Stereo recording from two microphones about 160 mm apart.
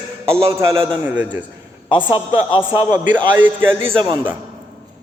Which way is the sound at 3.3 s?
15° right (ahead or behind).